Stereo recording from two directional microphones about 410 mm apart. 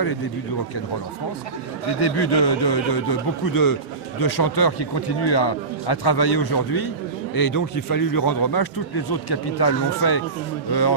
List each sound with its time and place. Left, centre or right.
2.0 s a man's voice: left